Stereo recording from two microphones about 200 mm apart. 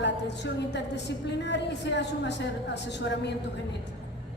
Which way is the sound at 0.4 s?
60° left (ahead or behind).